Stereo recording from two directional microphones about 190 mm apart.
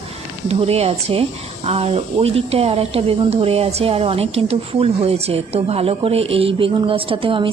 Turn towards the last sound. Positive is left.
turn(degrees=-25)  # may be behind; listen again after turning